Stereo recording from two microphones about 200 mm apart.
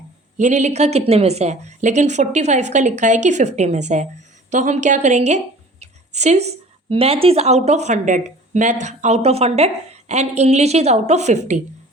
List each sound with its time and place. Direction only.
0.3 s speech: 35° right (ahead or behind)
5.8 s a sound: 35° right (ahead or behind)
6.8 s speech: 25° right (ahead or behind)